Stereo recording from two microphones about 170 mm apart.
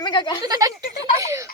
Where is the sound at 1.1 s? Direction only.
20° right (ahead or behind).